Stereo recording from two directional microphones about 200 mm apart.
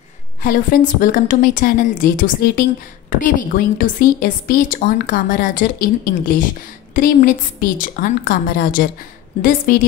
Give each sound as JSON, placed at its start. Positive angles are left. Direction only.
{"t": 0.4, "sound": "a woman's voice", "side_deg": 45}